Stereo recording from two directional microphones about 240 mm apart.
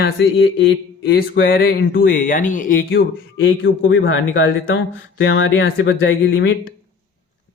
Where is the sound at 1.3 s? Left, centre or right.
Left.